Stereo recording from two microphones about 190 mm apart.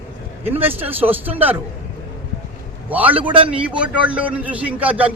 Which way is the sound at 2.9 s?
10° right (ahead or behind).